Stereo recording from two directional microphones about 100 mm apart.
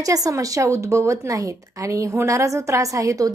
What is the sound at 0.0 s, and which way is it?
A woman's voice, 35° right (ahead or behind).